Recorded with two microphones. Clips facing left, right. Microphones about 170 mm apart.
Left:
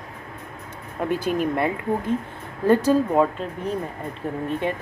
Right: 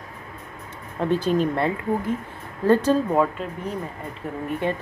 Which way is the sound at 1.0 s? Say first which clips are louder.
Right 2 dB; 10° left (ahead or behind).